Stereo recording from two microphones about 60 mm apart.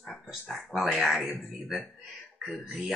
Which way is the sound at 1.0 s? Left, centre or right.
Centre.